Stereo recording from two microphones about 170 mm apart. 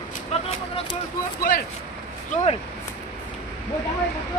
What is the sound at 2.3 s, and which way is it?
Speech, 40° left (ahead or behind).